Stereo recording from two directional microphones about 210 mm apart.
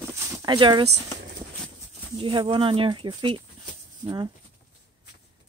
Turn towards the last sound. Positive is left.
turn(degrees=-20)  # may be behind; listen again after turning